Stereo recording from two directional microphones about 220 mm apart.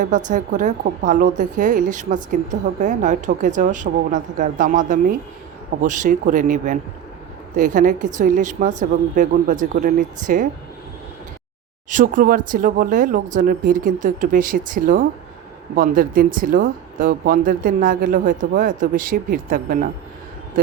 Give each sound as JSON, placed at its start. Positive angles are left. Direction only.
{"t": 0.0, "sound": "a woman's voice", "side_deg": -35}
{"t": 11.9, "sound": "a woman's voice", "side_deg": -35}